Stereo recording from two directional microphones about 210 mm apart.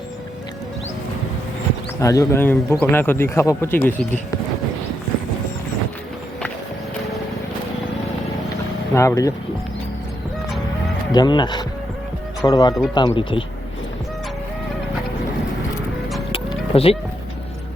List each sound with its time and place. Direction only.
2.0 s speech: 15° left (ahead or behind)
9.0 s speech: 15° left (ahead or behind)
11.1 s speech: 20° left (ahead or behind)
16.3 s music: 30° left (ahead or behind)